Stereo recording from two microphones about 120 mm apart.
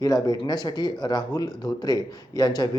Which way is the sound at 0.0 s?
30° left (ahead or behind).